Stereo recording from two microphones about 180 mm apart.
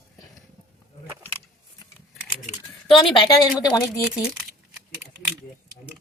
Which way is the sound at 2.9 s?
20° left (ahead or behind).